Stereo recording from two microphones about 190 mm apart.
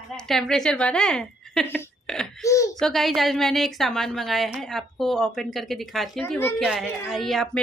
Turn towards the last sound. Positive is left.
turn(degrees=0)  # may be behind; listen again after turning